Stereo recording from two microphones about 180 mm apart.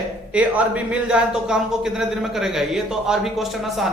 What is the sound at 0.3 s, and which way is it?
Speech, 5° right (ahead or behind).